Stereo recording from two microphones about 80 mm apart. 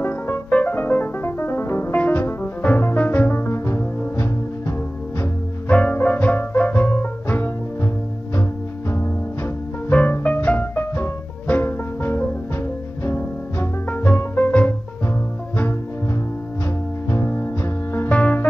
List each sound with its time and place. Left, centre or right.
0.0 s music: left
3.3 s music: left
5.2 s music: centre
9.8 s music: centre
13.8 s music: left
17.1 s music: left
17.9 s music: centre